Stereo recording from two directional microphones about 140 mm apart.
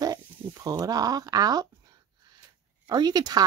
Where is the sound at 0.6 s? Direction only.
25° right (ahead or behind).